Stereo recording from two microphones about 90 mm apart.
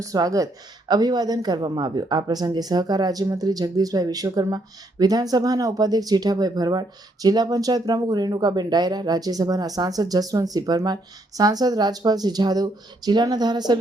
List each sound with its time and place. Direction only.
0.0 s speech: 40° right (ahead or behind)